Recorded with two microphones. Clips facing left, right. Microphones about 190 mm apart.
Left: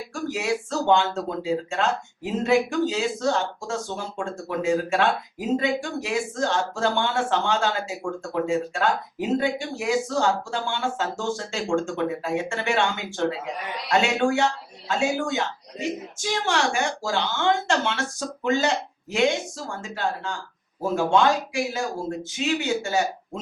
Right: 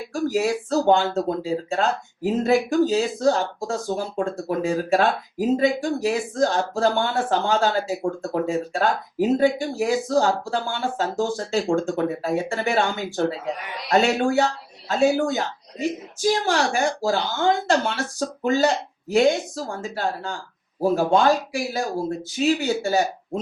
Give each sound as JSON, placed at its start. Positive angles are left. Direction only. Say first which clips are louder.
{"t": 0.1, "sound": "speech", "louder": "right 5 dB", "side_deg": -35}